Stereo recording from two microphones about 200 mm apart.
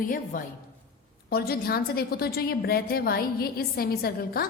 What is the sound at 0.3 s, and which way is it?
A woman's voice, 40° left (ahead or behind).